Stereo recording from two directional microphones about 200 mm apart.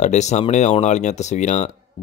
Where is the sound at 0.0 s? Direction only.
35° left (ahead or behind).